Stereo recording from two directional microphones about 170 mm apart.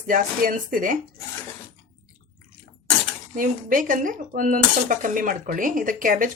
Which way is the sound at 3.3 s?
55° right (ahead or behind).